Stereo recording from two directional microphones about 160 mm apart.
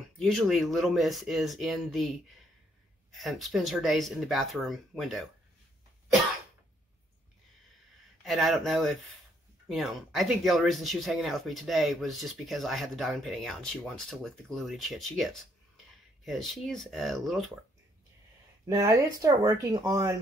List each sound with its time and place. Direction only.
0.2 s speech: centre (ahead or behind)
8.2 s speech: centre (ahead or behind)
18.7 s speech: 20° right (ahead or behind)